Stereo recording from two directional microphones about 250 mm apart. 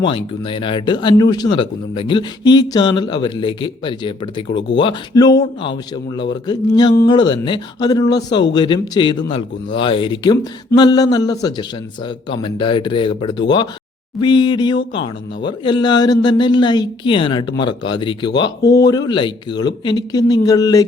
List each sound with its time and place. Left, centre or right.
0.0 s speech: centre